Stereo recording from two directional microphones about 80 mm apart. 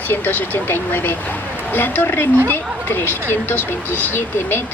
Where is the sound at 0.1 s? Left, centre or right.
Left.